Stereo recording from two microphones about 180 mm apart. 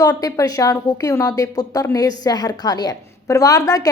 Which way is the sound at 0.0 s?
20° left (ahead or behind).